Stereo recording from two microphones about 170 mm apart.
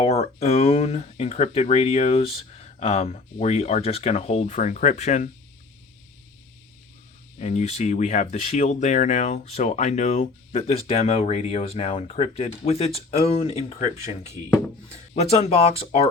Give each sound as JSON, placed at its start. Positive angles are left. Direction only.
{"t": 0.0, "sound": "speech", "side_deg": 40}
{"t": 7.3, "sound": "speech", "side_deg": 45}
{"t": 15.1, "sound": "speech", "side_deg": 40}